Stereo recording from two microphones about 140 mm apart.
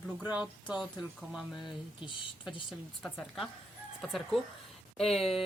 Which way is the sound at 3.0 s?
5° left (ahead or behind).